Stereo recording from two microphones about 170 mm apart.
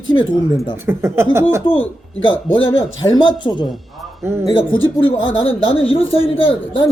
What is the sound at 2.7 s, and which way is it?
A man's voice, 30° left (ahead or behind).